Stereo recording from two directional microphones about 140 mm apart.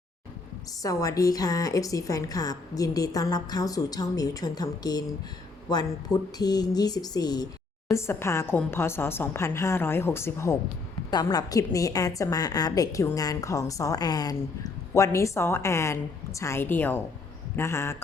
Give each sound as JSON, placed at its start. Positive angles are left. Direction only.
{"t": 0.8, "sound": "a woman's voice", "side_deg": 25}